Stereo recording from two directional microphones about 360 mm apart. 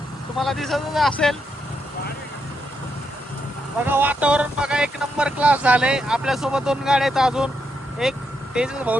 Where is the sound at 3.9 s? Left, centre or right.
Centre.